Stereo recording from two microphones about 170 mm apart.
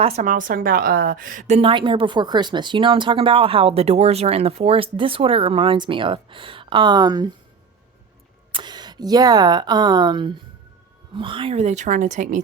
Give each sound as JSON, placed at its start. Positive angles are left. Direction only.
{"t": 0.0, "sound": "a woman's voice", "side_deg": -45}
{"t": 8.5, "sound": "a woman's voice", "side_deg": -25}